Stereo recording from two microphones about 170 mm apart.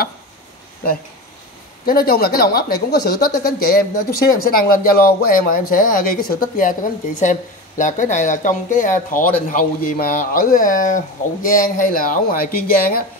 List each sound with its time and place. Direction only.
1.9 s a woman's voice: 60° left (ahead or behind)